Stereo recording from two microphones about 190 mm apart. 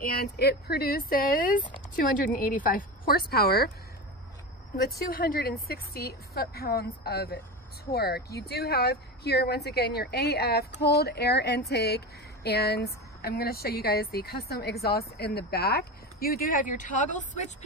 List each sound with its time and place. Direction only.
0.0 s a woman's voice: 55° left (ahead or behind)
4.8 s a woman's voice: 50° left (ahead or behind)